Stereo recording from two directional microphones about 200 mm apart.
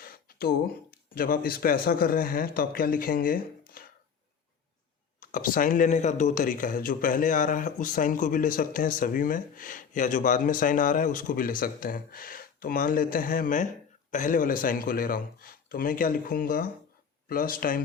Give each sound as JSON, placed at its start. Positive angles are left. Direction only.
{"t": 0.0, "sound": "speech", "side_deg": 50}
{"t": 3.8, "sound": "a sound", "side_deg": 45}
{"t": 5.2, "sound": "speech", "side_deg": 45}